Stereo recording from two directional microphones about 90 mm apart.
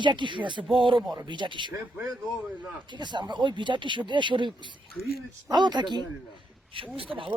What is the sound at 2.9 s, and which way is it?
Speech, 60° right (ahead or behind).